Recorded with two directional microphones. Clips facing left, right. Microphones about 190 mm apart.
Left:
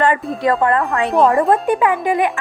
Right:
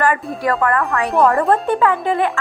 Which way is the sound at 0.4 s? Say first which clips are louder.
Left 2 dB; 20° left (ahead or behind).